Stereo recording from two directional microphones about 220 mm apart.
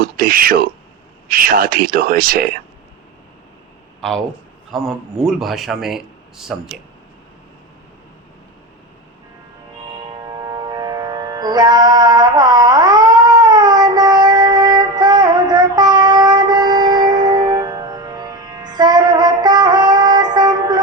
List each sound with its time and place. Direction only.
0.0 s speech: 40° right (ahead or behind)
4.7 s a man's voice: centre (ahead or behind)
10.3 s music: 15° right (ahead or behind)